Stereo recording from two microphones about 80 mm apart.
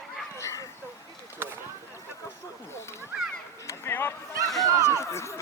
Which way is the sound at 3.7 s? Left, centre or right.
Left.